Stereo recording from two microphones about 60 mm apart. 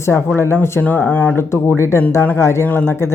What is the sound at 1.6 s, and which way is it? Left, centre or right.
Speech, left.